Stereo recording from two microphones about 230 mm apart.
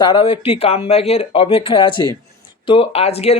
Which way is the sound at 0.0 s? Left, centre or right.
Left.